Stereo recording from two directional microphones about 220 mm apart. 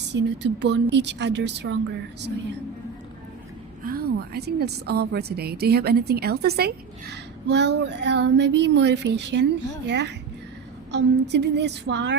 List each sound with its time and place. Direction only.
0.1 s a woman's voice: 50° right (ahead or behind)
3.8 s a woman's voice: 45° right (ahead or behind)